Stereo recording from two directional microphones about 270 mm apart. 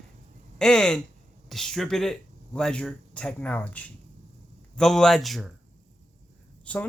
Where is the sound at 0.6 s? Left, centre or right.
Centre.